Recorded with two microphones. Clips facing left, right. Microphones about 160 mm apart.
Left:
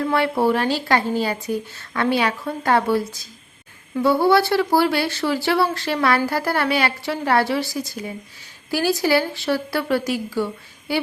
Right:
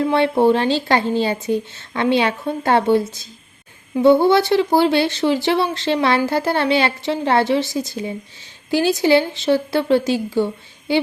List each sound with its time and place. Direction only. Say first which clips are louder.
0.0 s speech: right 4 dB; 25° right (ahead or behind)